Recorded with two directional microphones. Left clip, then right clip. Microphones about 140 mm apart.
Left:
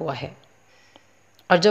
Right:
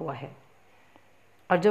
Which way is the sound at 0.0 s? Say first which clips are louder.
Left 6 dB; 25° left (ahead or behind).